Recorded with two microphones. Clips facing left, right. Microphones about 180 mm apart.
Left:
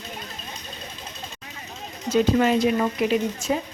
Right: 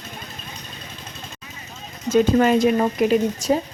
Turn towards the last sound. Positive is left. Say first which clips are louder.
# right 4 dB
turn(degrees=-40)  # may be behind; listen again after turning